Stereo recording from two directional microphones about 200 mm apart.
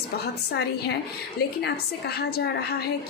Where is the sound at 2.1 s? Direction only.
50° left (ahead or behind).